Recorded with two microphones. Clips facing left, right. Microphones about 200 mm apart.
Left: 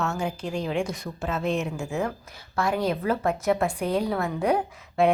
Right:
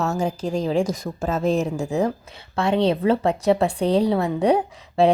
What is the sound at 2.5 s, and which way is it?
A woman's voice, 25° right (ahead or behind).